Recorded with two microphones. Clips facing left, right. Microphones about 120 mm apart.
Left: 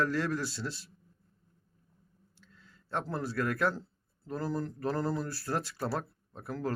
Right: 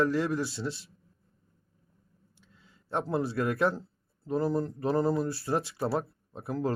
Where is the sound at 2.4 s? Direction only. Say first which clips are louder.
Left 1 dB; 15° right (ahead or behind).